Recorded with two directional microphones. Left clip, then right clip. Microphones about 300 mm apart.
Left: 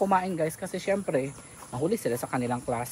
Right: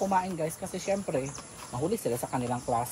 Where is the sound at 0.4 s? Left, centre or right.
Centre.